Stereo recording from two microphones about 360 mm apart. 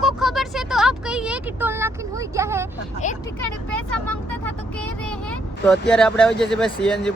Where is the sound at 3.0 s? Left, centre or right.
Left.